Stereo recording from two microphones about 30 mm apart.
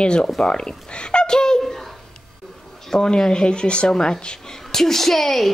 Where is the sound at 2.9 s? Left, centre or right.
Left.